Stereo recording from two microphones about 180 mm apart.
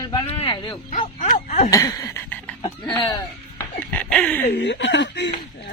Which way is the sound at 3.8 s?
10° left (ahead or behind).